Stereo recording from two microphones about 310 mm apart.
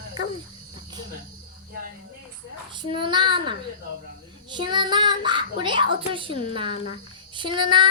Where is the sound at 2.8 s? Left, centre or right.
Centre.